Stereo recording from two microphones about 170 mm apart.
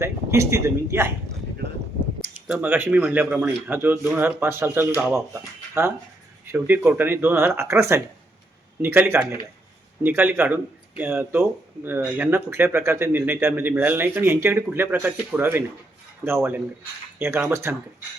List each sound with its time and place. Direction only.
0.0 s speech: 15° right (ahead or behind)
2.5 s speech: 10° right (ahead or behind)